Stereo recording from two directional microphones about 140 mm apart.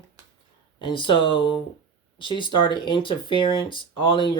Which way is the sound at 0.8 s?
35° left (ahead or behind).